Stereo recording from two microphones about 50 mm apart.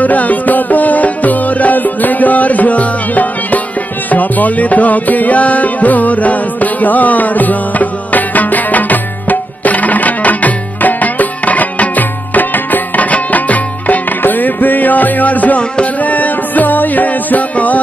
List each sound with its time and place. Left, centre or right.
0.0 s music: left